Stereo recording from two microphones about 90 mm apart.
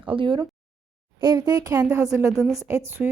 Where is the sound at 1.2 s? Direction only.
55° right (ahead or behind).